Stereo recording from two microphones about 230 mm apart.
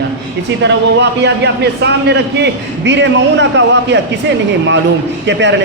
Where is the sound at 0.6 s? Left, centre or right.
Right.